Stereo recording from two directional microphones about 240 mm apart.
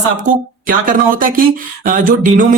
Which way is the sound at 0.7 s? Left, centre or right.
Right.